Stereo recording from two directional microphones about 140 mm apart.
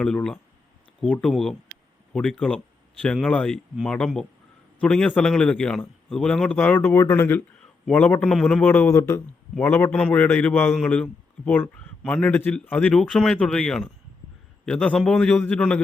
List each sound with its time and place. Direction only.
0.0 s a man's voice: 5° left (ahead or behind)